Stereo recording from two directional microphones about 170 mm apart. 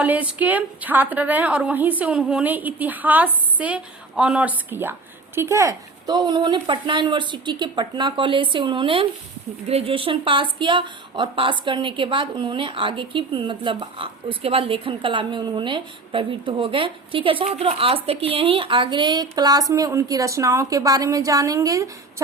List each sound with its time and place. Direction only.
0.0 s a woman's voice: 10° right (ahead or behind)